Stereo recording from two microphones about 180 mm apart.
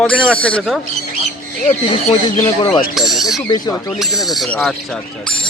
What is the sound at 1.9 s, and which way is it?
Speech, 40° left (ahead or behind).